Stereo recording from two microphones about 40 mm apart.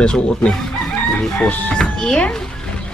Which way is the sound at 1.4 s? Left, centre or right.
Left.